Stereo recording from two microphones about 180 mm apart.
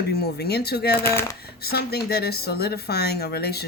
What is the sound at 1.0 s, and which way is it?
Speech, 15° left (ahead or behind).